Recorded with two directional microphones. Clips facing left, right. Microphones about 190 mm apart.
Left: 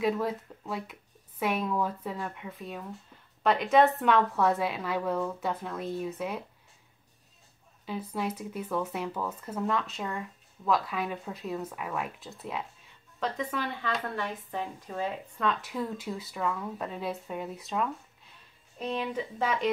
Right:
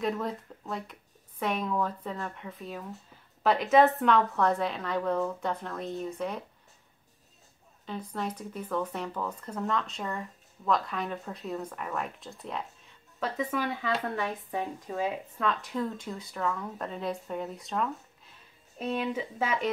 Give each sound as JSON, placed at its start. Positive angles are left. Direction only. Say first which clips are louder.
{"t": 0.0, "sound": "a woman's voice", "louder": "left 3 dB", "side_deg": 5}
{"t": 7.8, "sound": "speech", "louder": "left 2 dB", "side_deg": 5}
{"t": 13.2, "sound": "speech", "louder": "right 1 dB", "side_deg": -5}